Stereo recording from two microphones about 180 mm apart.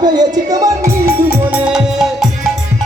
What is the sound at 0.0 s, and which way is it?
Music, 20° right (ahead or behind).